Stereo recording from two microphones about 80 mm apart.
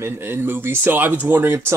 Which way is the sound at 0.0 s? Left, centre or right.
Right.